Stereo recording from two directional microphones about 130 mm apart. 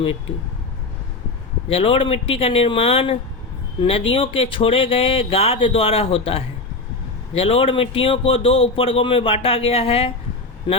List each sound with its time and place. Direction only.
1.7 s a man's voice: 45° left (ahead or behind)